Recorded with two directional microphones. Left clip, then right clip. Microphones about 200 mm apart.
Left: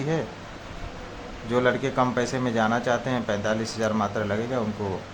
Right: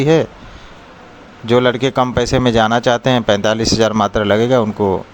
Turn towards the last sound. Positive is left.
turn(degrees=-45)  # may be behind; listen again after turning